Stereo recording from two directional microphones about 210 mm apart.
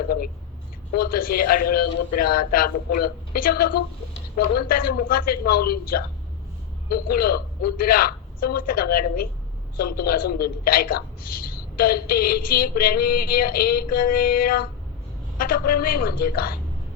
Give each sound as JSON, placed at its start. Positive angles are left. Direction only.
{"t": 0.9, "sound": "a man's voice", "side_deg": 45}